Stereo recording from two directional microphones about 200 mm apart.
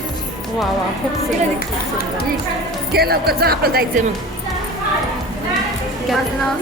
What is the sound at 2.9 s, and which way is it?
Speech, 50° right (ahead or behind).